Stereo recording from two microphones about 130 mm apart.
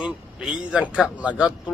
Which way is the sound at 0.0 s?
5° right (ahead or behind).